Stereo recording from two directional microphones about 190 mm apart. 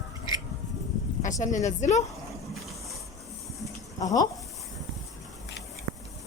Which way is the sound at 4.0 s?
20° left (ahead or behind).